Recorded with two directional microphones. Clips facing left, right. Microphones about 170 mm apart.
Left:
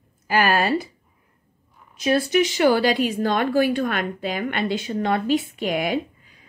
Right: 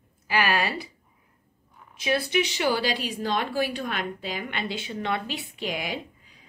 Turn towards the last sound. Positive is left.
turn(degrees=55)  # may be behind; listen again after turning